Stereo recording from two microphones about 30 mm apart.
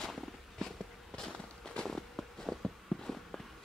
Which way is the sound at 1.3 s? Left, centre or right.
Left.